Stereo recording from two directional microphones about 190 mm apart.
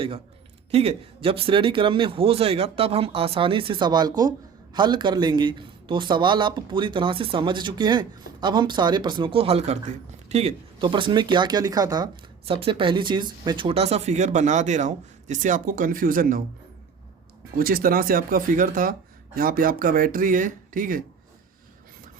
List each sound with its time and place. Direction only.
0.7 s speech: 30° right (ahead or behind); by 16.4 s 45° right (ahead or behind)
17.6 s speech: 50° right (ahead or behind)